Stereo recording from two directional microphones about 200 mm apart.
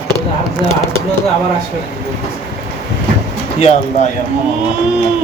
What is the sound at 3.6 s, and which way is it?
Speech, 30° left (ahead or behind).